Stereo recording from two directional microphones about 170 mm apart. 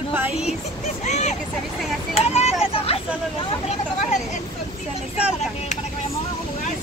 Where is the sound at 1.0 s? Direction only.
40° left (ahead or behind).